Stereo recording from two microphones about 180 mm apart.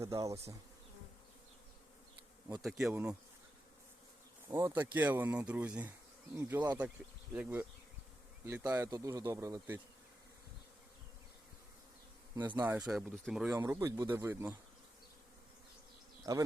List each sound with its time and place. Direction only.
0.0 s speech: 15° right (ahead or behind)
2.6 s speech: centre (ahead or behind)
4.4 s speech: 15° right (ahead or behind)
12.4 s speech: 20° right (ahead or behind)
12.9 s speech: centre (ahead or behind)
13.5 s speech: 15° right (ahead or behind)
16.3 s speech: 15° right (ahead or behind)